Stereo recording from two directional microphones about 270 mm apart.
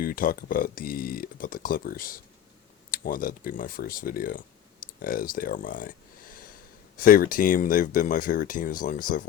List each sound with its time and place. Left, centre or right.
0.0 s speech: left
7.0 s speech: left